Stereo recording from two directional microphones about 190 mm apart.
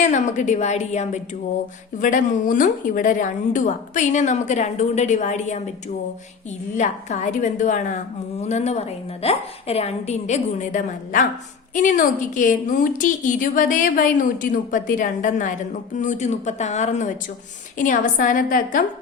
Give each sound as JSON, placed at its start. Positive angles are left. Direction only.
{"t": 0.0, "sound": "a woman's voice", "side_deg": 40}
{"t": 6.7, "sound": "a woman's voice", "side_deg": 40}